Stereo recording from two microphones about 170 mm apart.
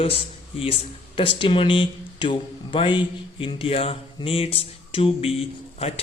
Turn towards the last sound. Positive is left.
turn(degrees=35)  # may be behind; listen again after turning